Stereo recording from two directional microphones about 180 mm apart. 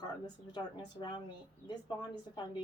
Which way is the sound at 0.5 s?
25° left (ahead or behind).